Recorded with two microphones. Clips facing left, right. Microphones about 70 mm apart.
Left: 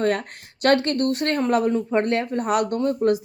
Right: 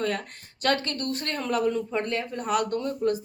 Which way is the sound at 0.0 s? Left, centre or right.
Left.